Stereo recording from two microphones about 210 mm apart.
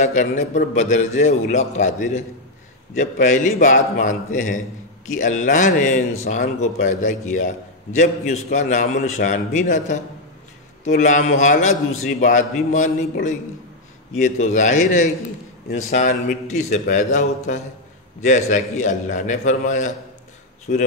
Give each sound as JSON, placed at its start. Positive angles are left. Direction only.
{"t": 0.0, "sound": "speech", "side_deg": 35}